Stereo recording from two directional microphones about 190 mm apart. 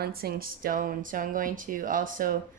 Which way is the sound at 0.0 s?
55° right (ahead or behind).